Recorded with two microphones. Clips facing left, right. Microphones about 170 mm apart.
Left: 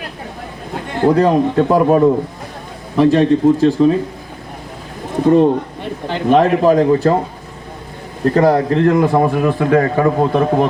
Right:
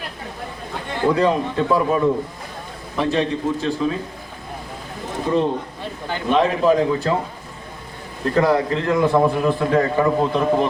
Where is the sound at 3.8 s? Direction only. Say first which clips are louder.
Left 10 dB; 40° left (ahead or behind).